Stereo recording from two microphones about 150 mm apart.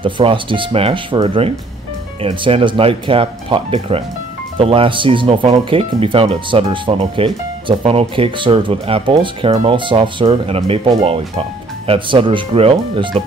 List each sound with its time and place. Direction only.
0.0 s speech: 35° right (ahead or behind)